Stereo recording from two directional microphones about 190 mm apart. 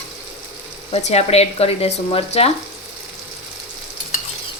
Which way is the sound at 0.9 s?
35° left (ahead or behind).